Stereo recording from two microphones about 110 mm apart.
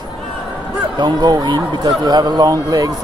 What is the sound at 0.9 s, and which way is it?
Speech, 40° right (ahead or behind).